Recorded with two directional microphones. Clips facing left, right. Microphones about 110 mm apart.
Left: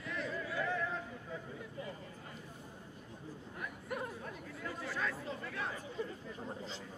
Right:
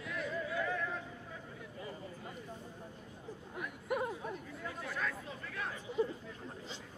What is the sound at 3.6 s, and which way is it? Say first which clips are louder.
Chatter: right 5 dB; 5° right (ahead or behind).